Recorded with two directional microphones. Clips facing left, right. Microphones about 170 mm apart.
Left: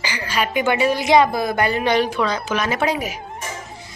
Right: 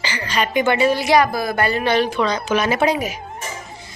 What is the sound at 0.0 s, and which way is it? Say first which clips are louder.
A woman's voice: right 1 dB; 10° left (ahead or behind).